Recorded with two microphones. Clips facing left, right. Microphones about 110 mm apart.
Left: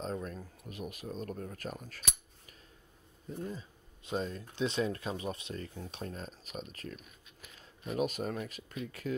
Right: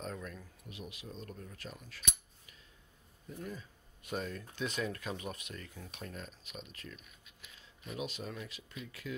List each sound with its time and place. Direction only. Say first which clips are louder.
0.0 s speech: left 5 dB; 35° left (ahead or behind)
3.3 s speech: left 4 dB; 30° left (ahead or behind); by 9.1 s 45° left (ahead or behind)